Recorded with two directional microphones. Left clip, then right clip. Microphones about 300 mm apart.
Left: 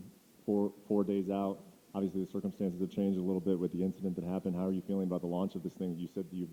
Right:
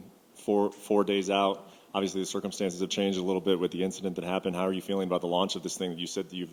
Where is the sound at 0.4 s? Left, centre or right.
Right.